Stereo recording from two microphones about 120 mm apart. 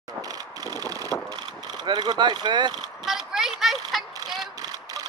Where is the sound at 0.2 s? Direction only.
30° right (ahead or behind).